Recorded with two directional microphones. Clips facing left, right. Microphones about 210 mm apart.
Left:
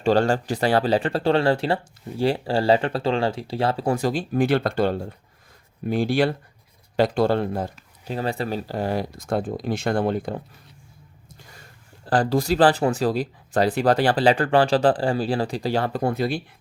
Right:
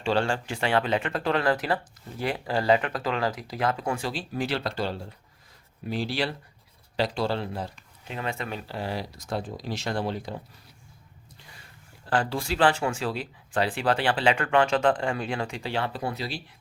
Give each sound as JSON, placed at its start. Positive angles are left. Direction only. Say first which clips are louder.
{"t": 0.0, "sound": "speech", "louder": "left 6 dB", "side_deg": 40}
{"t": 11.3, "sound": "snort", "louder": "left 4 dB", "side_deg": 45}
{"t": 12.0, "sound": "speech", "louder": "left 7 dB", "side_deg": 35}